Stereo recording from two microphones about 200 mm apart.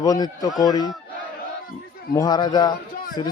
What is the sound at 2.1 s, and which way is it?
Speech, 20° left (ahead or behind).